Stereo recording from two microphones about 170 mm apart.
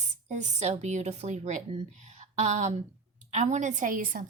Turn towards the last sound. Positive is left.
turn(degrees=-50)  # may be behind; listen again after turning